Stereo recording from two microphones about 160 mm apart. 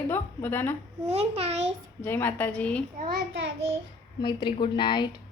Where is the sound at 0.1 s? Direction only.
15° left (ahead or behind).